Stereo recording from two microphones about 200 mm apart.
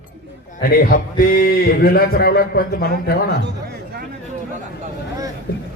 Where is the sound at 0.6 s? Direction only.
45° left (ahead or behind).